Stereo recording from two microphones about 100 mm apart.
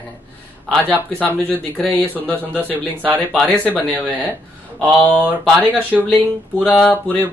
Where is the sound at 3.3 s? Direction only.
10° left (ahead or behind).